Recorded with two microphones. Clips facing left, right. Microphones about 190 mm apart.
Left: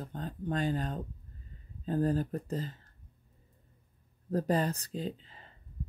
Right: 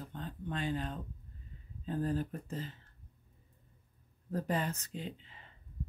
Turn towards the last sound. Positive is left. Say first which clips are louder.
# left 6 dB
turn(degrees=35)  # may be behind; listen again after turning